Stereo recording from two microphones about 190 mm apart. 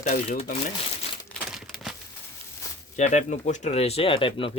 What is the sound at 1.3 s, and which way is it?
Crumpling, centre (ahead or behind).